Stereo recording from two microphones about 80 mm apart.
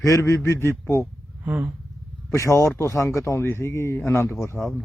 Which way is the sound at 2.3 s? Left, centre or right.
Left.